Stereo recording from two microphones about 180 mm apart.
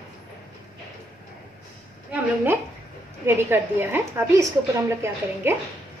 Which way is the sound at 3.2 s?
10° right (ahead or behind).